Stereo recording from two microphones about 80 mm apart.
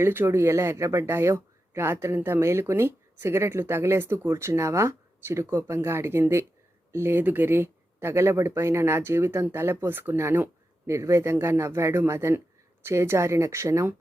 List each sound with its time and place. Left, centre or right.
0.0 s speech: right